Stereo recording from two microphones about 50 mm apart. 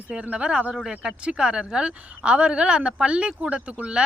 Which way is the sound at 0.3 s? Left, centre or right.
Right.